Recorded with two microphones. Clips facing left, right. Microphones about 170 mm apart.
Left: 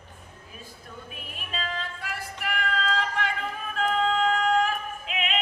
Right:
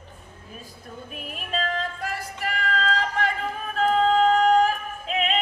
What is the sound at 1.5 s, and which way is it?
Music, 45° right (ahead or behind).